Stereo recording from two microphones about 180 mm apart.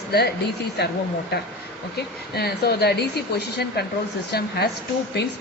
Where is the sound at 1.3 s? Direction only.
65° left (ahead or behind).